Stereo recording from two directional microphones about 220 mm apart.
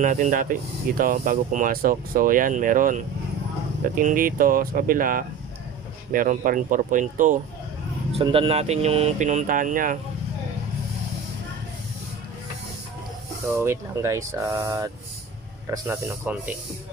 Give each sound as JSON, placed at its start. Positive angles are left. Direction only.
{"t": 0.0, "sound": "speech", "side_deg": -35}
{"t": 4.0, "sound": "speech", "side_deg": -40}
{"t": 8.1, "sound": "speech", "side_deg": -25}
{"t": 13.5, "sound": "speech", "side_deg": -10}